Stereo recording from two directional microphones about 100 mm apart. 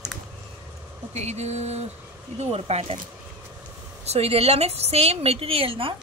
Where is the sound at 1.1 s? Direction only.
90° right.